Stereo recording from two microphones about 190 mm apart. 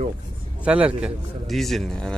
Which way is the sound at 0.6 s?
5° right (ahead or behind).